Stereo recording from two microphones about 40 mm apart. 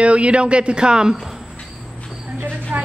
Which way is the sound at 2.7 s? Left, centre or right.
Right.